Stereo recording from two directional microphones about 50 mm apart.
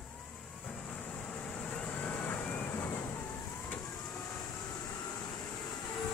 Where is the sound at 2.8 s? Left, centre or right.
Left.